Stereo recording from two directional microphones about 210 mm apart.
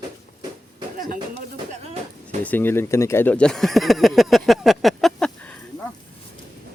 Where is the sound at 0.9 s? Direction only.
40° right (ahead or behind).